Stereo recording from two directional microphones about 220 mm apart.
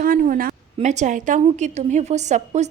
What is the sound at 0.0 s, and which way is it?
A woman's voice, 40° right (ahead or behind).